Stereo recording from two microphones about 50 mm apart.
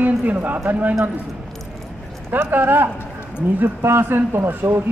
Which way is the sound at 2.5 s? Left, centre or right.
Right.